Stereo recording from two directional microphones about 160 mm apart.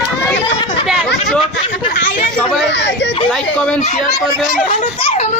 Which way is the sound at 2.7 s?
90° left.